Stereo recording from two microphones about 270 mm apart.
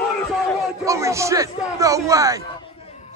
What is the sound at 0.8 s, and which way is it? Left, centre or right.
Speech, centre.